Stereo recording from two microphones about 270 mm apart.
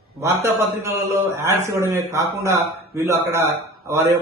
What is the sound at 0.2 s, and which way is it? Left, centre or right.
A man's voice, centre.